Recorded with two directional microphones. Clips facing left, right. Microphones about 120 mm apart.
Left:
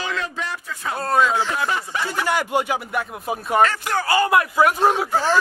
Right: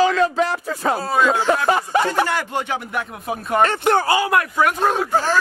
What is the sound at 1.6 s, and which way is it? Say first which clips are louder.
Speech: right 7 dB; 50° right (ahead or behind).